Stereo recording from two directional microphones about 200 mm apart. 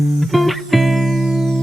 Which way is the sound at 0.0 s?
Centre (ahead or behind).